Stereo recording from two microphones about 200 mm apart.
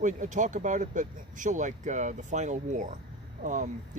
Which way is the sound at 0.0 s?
40° right (ahead or behind).